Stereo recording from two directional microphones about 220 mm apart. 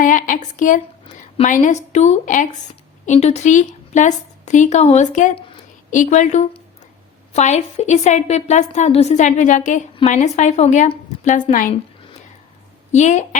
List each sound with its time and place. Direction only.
0.0 s a woman's voice: 35° left (ahead or behind)
12.9 s a woman's voice: 30° left (ahead or behind)